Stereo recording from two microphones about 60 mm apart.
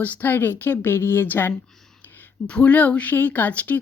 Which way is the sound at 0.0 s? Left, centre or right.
Left.